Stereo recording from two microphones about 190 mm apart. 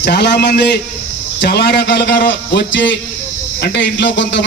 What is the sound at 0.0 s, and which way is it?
A man's voice, 65° left (ahead or behind).